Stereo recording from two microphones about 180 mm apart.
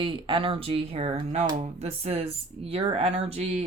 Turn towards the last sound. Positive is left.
turn(degrees=-35)  # may be behind; listen again after turning